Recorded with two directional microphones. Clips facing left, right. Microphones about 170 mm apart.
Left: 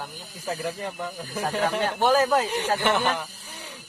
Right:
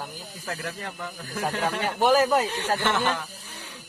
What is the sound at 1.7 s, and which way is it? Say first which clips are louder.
Speech: right 1 dB; 5° right (ahead or behind).